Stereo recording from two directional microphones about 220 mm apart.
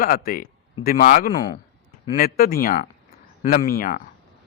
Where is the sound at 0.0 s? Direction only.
40° left (ahead or behind).